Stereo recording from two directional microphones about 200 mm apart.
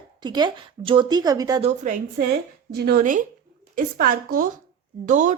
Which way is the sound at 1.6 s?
40° right (ahead or behind).